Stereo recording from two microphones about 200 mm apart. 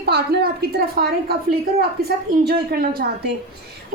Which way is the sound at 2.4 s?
50° right (ahead or behind).